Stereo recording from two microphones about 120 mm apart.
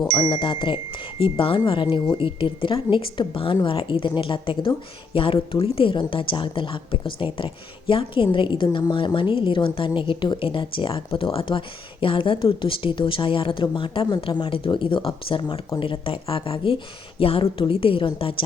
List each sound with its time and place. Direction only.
0.1 s speech: 40° left (ahead or behind)